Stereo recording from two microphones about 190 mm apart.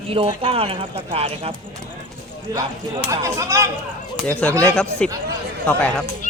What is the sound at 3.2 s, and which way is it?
Speech, 15° right (ahead or behind).